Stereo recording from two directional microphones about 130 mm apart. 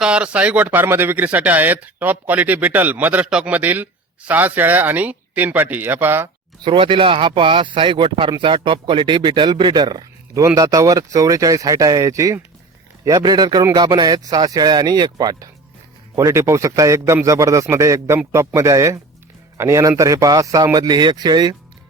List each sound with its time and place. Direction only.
0.0 s speech: 10° right (ahead or behind)
6.7 s a man's voice: 40° right (ahead or behind)